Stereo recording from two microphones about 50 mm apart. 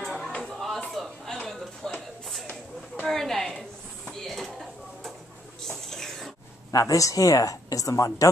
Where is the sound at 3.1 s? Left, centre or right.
Centre.